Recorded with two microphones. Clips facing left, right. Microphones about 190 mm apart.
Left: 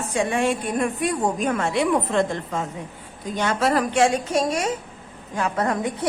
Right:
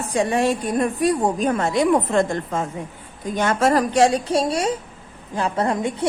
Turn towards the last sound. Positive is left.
turn(degrees=-25)  # may be behind; listen again after turning